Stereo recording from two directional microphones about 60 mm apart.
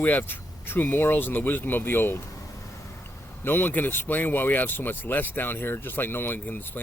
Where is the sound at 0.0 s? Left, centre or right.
Left.